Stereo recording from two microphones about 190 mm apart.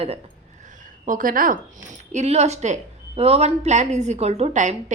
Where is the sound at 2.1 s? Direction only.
35° right (ahead or behind).